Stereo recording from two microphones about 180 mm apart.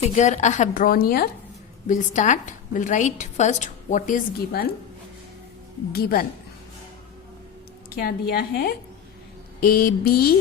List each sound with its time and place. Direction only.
0.0 s a woman's voice: 40° left (ahead or behind); by 1.3 s 60° left (ahead or behind)
1.9 s a woman's voice: 45° left (ahead or behind)
5.9 s speech: 55° left (ahead or behind)
7.9 s speech: 60° left (ahead or behind)